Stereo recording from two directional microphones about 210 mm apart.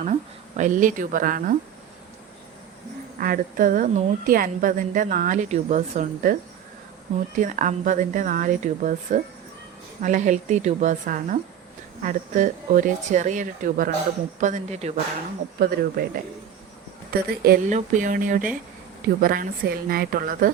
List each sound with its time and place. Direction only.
0.0 s speech: 35° right (ahead or behind)
3.2 s a woman's voice: 45° right (ahead or behind)
7.3 s a woman's voice: 35° right (ahead or behind)
15.5 s a woman's voice: 45° right (ahead or behind)
17.1 s a woman's voice: 45° right (ahead or behind)